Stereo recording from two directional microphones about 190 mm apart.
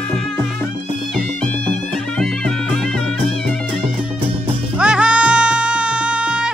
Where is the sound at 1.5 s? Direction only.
5° left (ahead or behind).